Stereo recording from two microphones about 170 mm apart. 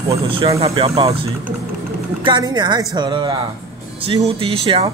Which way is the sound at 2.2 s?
25° right (ahead or behind).